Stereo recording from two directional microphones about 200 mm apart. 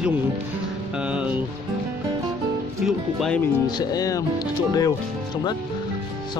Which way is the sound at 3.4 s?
20° left (ahead or behind).